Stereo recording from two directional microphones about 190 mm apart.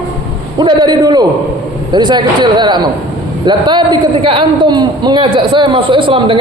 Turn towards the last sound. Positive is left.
turn(degrees=-25)  # may be behind; listen again after turning